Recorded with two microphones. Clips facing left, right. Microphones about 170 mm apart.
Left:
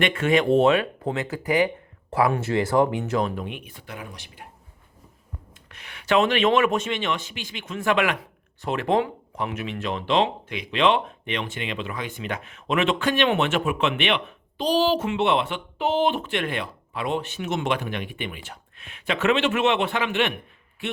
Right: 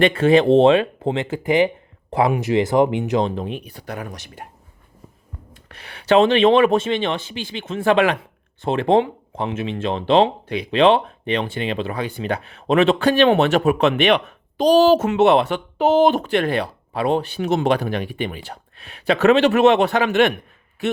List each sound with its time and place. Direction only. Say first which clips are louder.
0.0 s speech: right 7 dB; 30° right (ahead or behind)
5.6 s speech: right 7 dB; 35° right (ahead or behind)